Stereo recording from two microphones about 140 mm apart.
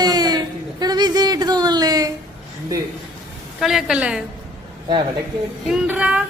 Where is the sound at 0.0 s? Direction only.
30° right (ahead or behind).